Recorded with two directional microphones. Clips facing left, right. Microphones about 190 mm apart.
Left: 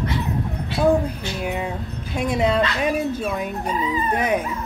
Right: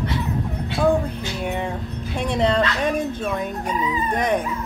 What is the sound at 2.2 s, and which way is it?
A woman's voice, 5° left (ahead or behind).